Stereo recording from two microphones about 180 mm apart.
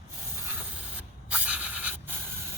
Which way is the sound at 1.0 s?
5° right (ahead or behind).